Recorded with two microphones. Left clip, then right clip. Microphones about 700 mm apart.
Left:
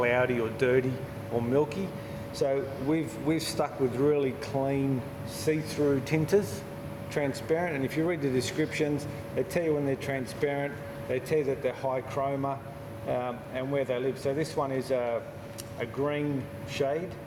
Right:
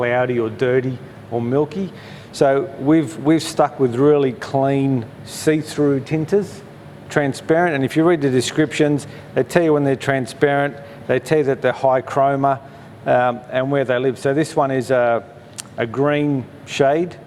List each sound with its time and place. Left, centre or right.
0.0 s a man's voice: right
2.3 s a man's voice: right